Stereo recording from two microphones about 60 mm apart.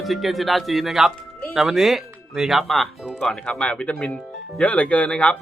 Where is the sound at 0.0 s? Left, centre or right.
Centre.